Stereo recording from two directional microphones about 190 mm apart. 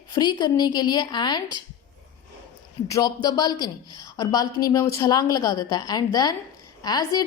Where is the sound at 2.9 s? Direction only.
20° left (ahead or behind).